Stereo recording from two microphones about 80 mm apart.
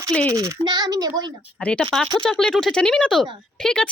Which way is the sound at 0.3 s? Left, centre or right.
Right.